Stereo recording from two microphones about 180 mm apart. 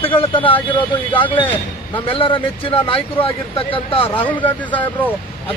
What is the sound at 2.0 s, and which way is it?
Speech, 30° left (ahead or behind).